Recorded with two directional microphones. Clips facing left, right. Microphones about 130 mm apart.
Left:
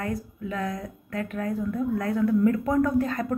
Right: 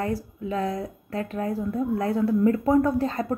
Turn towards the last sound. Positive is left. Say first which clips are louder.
# even
turn(degrees=-30)  # may be behind; listen again after turning